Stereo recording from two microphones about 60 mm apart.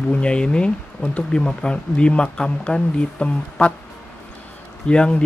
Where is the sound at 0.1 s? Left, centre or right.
Centre.